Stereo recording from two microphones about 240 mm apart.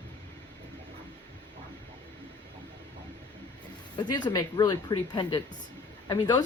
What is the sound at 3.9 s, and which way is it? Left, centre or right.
Speech, centre.